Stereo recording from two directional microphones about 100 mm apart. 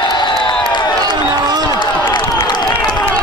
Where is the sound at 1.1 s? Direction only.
40° right (ahead or behind).